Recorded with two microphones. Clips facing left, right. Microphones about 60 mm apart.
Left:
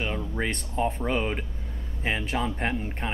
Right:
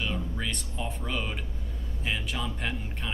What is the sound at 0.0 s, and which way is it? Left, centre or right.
Speech, left.